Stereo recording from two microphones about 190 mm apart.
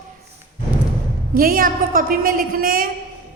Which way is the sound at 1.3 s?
50° right (ahead or behind).